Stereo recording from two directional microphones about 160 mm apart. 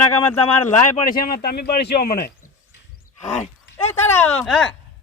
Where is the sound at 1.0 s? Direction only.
65° left (ahead or behind).